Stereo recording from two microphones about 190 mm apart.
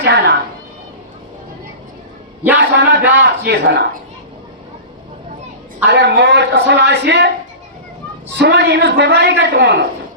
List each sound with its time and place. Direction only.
0.0 s speech: 65° right (ahead or behind)
2.6 s a sound: 70° right (ahead or behind)
3.0 s a sound: 10° right (ahead or behind)
3.4 s a man's voice: 60° right (ahead or behind)
5.8 s a woman's voice: 70° right (ahead or behind)
8.3 s a man's voice: 65° right (ahead or behind)